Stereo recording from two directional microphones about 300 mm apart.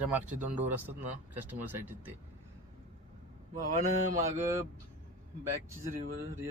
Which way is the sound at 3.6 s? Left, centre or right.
Right.